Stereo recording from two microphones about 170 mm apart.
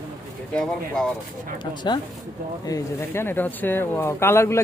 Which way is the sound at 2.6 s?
15° left (ahead or behind).